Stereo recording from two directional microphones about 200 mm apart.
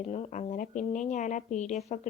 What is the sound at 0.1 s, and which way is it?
A woman's voice, 35° left (ahead or behind).